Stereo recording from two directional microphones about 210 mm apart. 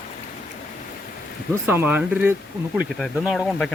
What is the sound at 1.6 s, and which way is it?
Speech, 10° right (ahead or behind).